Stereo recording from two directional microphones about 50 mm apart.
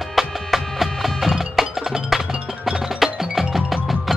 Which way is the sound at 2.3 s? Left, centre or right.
Right.